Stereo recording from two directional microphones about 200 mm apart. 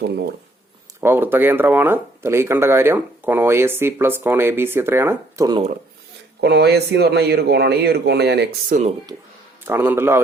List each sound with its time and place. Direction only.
1.0 s speech: 10° right (ahead or behind)
6.4 s a man's voice: 55° right (ahead or behind)
8.7 s speech: 40° right (ahead or behind)
9.6 s speech: 10° right (ahead or behind)